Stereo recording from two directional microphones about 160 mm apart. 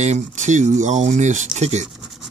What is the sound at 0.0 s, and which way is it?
Speech, 45° right (ahead or behind).